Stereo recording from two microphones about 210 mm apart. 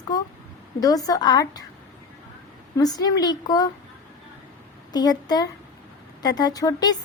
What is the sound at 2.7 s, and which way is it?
Speech, 20° left (ahead or behind).